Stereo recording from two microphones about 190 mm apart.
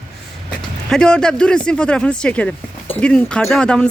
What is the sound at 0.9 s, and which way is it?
Speech, 5° left (ahead or behind).